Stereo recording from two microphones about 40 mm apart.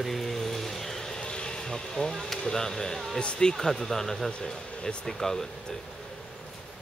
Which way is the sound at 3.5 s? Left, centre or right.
Centre.